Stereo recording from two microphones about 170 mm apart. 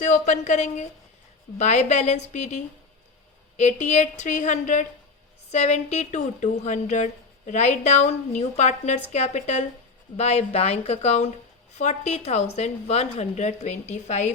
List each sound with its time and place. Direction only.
0.0 s a woman's voice: 45° left (ahead or behind)